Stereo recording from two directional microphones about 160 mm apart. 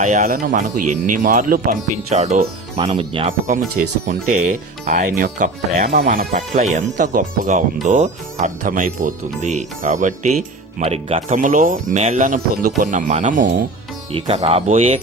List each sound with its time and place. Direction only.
0.0 s speech: 50° right (ahead or behind)
2.8 s speech: 30° right (ahead or behind)
4.1 s speech: 50° right (ahead or behind)
10.8 s speech: 40° right (ahead or behind)
11.3 s speech: 55° right (ahead or behind)
14.1 s speech: 40° right (ahead or behind)